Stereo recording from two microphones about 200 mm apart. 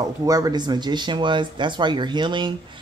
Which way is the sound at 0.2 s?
20° right (ahead or behind).